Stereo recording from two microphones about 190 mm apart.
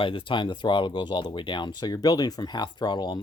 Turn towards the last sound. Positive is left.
turn(degrees=25)  # may be behind; listen again after turning